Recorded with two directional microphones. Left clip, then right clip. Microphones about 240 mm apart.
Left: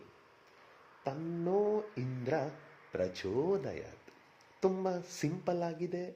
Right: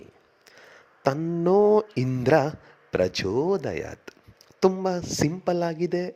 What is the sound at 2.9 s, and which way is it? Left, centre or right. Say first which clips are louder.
Speech: right 11 dB; right.